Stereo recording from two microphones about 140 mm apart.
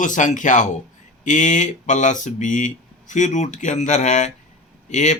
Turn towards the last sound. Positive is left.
turn(degrees=55)  # may be behind; listen again after turning